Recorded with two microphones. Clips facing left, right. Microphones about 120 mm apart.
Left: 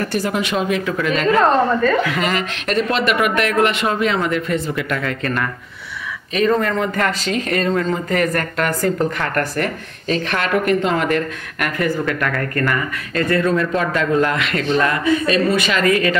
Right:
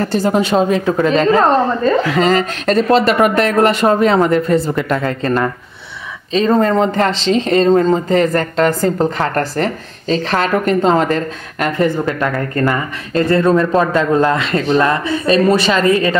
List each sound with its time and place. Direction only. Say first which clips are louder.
0.0 s a woman's voice: right 6 dB; 30° right (ahead or behind)